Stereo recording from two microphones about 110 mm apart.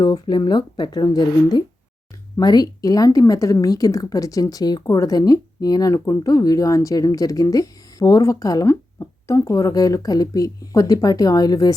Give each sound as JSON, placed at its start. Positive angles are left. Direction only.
{"t": 0.0, "sound": "speech", "side_deg": 40}